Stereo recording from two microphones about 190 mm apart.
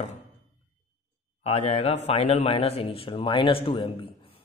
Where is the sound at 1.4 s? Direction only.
35° left (ahead or behind).